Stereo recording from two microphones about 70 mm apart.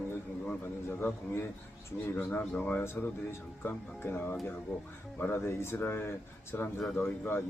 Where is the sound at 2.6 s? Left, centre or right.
Left.